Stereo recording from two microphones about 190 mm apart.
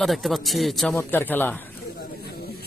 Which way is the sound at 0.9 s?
15° left (ahead or behind).